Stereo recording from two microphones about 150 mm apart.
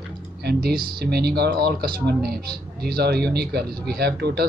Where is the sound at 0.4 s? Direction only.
90° right.